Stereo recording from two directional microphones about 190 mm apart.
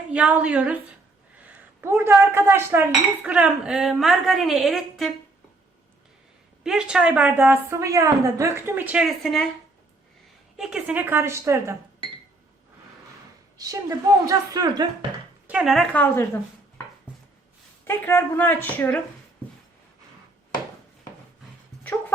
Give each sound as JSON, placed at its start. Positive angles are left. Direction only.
{"t": 0.1, "sound": "a woman's voice", "side_deg": -5}
{"t": 1.8, "sound": "dishes", "side_deg": -10}
{"t": 6.6, "sound": "a woman's voice", "side_deg": -5}
{"t": 10.6, "sound": "a woman's voice", "side_deg": -5}
{"t": 13.6, "sound": "a woman's voice", "side_deg": -20}
{"t": 15.4, "sound": "speech", "side_deg": -5}
{"t": 17.8, "sound": "a woman's voice", "side_deg": 10}